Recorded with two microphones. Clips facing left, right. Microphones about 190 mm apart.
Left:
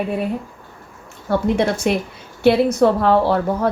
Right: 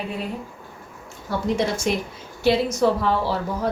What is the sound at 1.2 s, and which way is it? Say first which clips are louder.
Speech: left 5 dB; 60° left (ahead or behind).